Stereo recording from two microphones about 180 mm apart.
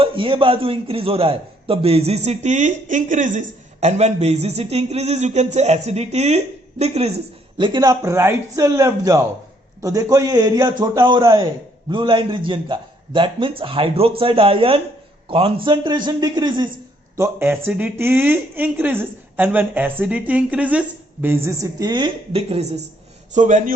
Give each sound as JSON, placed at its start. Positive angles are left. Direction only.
{"t": 0.0, "sound": "a man's voice", "side_deg": -30}
{"t": 7.6, "sound": "a man's voice", "side_deg": -25}
{"t": 17.2, "sound": "a man's voice", "side_deg": -15}